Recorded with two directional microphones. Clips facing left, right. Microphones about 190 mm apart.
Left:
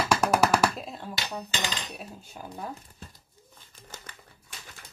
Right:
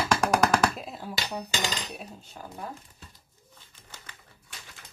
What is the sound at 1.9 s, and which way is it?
Speech, centre (ahead or behind).